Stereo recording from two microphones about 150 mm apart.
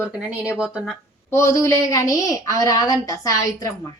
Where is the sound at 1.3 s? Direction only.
20° left (ahead or behind).